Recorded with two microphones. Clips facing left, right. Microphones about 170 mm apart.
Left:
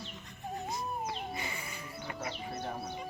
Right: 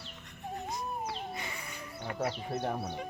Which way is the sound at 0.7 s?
Centre (ahead or behind).